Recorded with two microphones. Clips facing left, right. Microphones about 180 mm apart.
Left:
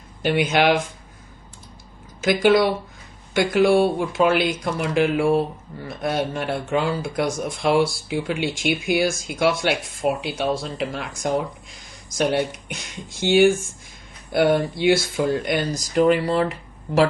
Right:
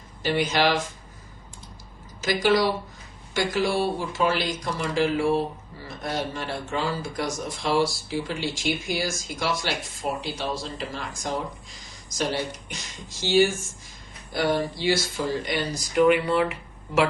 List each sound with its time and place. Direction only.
0.2 s speech: 60° left (ahead or behind)
2.2 s speech: 55° left (ahead or behind)
16.0 s speech: 40° left (ahead or behind)